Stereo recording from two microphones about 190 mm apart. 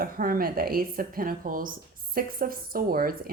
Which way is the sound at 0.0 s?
50° right (ahead or behind).